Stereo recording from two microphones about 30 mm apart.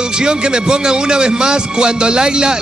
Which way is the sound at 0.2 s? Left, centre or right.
Right.